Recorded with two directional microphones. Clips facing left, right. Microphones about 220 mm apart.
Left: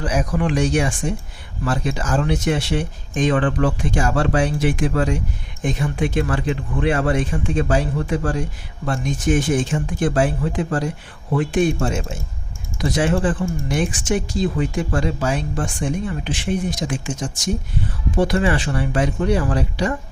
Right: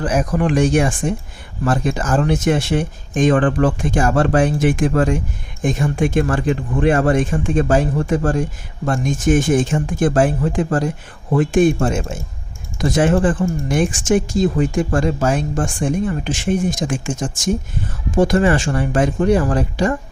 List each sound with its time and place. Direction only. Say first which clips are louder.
0.0 s speech: right 3 dB; 50° right (ahead or behind)